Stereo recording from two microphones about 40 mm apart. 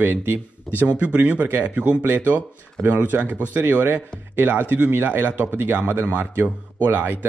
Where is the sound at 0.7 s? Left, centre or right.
Right.